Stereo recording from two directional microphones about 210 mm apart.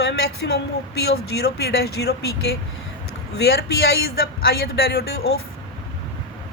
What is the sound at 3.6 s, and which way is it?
Speech, 45° left (ahead or behind).